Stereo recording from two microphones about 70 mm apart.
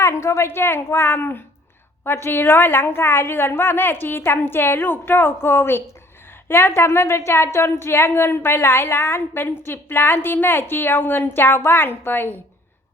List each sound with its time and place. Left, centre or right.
0.0 s a woman's voice: left